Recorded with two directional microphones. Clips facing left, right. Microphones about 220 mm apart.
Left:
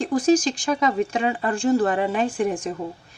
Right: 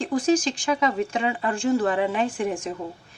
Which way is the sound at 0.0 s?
40° left (ahead or behind).